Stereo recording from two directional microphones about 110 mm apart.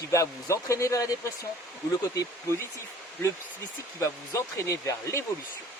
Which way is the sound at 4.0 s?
25° left (ahead or behind).